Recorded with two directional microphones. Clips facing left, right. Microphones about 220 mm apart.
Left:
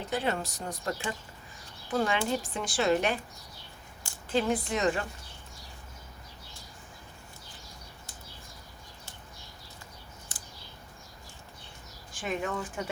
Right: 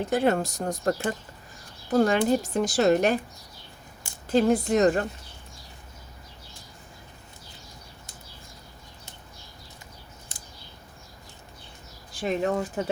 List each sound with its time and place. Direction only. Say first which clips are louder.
0.1 s a woman's voice: right 7 dB; 50° right (ahead or behind)
4.3 s a woman's voice: right 7 dB; 40° right (ahead or behind)
12.1 s a woman's voice: right 7 dB; 35° right (ahead or behind)